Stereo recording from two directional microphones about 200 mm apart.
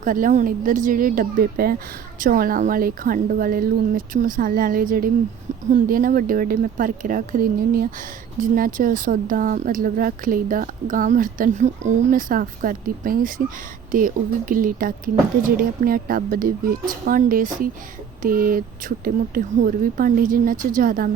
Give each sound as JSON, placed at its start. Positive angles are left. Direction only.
{"t": 0.0, "sound": "speech", "side_deg": -40}